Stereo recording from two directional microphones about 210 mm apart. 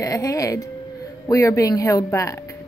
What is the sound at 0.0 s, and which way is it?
Speech, 15° left (ahead or behind).